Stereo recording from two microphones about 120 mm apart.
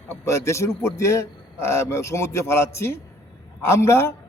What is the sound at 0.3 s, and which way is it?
A man's voice, 25° left (ahead or behind).